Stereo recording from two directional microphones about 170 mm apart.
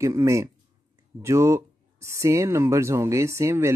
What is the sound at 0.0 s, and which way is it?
Speech, 15° right (ahead or behind).